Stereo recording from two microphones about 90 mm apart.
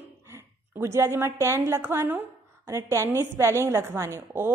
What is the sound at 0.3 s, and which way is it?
A woman's voice, 30° right (ahead or behind).